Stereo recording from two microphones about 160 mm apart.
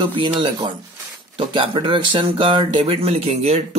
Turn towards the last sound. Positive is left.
turn(degrees=-45)  # may be behind; listen again after turning